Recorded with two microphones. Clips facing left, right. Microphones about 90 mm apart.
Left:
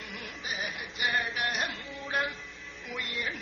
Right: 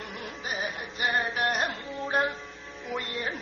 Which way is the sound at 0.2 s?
40° right (ahead or behind).